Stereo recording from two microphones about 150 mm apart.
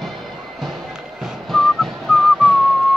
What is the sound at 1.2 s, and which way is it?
Whistling, centre (ahead or behind).